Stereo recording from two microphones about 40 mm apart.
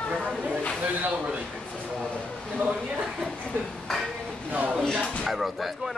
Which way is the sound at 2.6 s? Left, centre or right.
Right.